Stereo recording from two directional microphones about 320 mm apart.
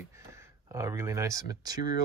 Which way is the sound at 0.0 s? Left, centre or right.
Centre.